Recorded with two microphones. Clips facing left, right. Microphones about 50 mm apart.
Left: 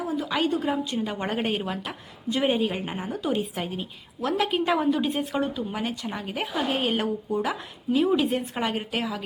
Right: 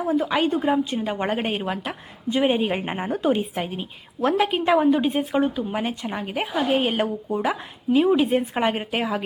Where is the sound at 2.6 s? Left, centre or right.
Right.